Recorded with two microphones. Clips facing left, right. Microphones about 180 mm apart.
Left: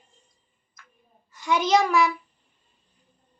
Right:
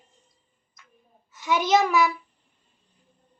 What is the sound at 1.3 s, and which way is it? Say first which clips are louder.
Speech: even; centre (ahead or behind).